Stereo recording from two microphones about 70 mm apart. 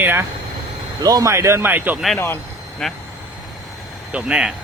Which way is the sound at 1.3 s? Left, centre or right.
Right.